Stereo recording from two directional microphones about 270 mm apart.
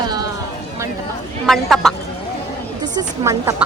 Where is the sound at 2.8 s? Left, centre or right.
Centre.